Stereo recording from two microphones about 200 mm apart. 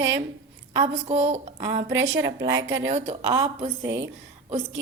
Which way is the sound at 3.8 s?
65° right (ahead or behind).